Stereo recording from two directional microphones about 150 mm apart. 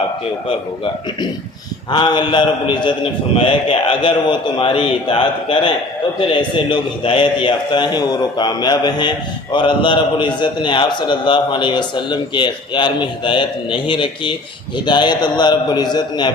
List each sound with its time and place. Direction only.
1.9 s a man's voice: 30° left (ahead or behind)